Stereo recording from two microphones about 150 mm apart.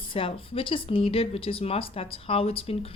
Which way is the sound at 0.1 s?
35° left (ahead or behind).